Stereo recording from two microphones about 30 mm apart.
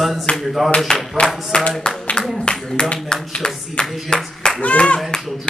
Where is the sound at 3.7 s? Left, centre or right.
Left.